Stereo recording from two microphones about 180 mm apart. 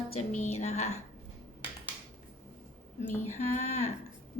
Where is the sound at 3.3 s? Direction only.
35° left (ahead or behind).